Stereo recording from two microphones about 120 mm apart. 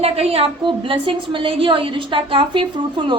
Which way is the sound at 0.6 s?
45° right (ahead or behind).